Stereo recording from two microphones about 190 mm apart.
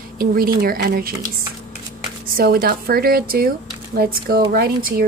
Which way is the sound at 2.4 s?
55° right (ahead or behind).